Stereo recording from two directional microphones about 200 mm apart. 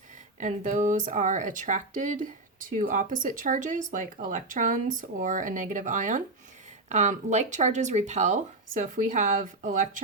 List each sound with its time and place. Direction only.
0.3 s speech: 40° right (ahead or behind)